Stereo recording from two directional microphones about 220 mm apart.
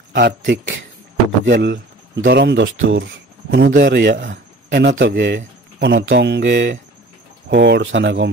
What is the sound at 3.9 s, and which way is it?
Speech, 50° right (ahead or behind).